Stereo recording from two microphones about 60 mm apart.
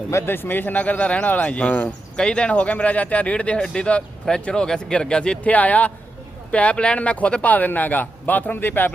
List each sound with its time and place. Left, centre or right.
0.1 s speech: left; by 5.5 s centre
5.5 s speech: left